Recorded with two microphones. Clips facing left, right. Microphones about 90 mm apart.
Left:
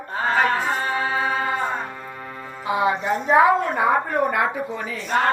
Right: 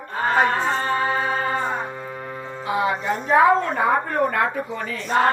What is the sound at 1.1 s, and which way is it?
Music, 35° right (ahead or behind).